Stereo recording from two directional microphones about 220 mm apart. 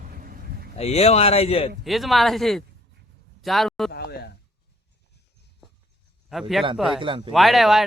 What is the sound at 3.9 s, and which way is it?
Speech, 45° left (ahead or behind).